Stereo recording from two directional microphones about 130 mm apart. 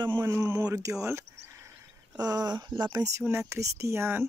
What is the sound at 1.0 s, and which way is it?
Cricket, 20° right (ahead or behind).